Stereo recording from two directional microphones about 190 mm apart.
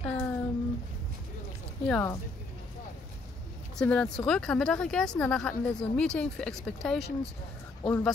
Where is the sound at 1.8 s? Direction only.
5° left (ahead or behind).